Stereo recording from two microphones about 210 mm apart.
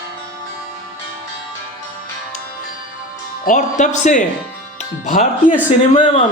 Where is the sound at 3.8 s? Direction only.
35° left (ahead or behind).